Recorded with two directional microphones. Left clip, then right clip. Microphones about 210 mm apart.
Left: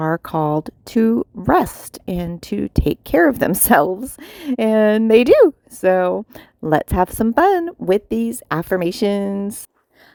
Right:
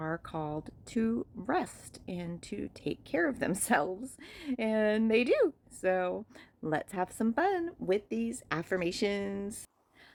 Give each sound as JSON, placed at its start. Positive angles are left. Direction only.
{"t": 0.0, "sound": "speech", "side_deg": 50}